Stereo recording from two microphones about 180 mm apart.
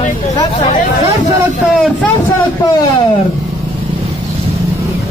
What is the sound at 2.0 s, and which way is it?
Speech, 10° left (ahead or behind).